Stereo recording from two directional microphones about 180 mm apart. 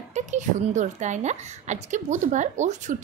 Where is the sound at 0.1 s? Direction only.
40° right (ahead or behind).